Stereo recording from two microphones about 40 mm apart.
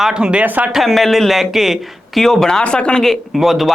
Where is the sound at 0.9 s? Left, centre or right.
Centre.